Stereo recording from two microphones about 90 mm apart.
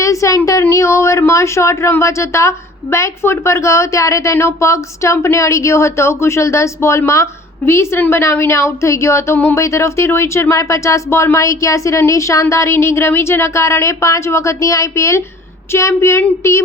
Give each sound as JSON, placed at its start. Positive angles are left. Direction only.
{"t": 0.0, "sound": "a woman's voice", "side_deg": 35}